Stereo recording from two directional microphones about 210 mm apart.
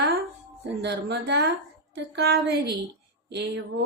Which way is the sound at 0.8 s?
55° right (ahead or behind).